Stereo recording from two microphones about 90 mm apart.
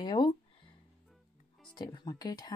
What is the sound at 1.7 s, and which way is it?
Speech, 50° left (ahead or behind).